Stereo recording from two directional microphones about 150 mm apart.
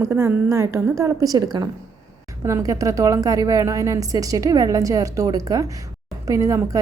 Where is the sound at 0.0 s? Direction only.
15° right (ahead or behind).